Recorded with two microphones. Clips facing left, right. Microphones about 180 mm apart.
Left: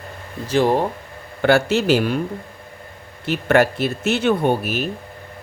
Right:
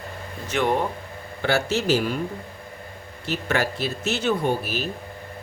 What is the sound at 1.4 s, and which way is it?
Speech, 60° left (ahead or behind).